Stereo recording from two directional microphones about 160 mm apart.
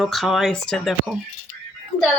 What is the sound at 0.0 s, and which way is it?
A woman's voice, centre (ahead or behind).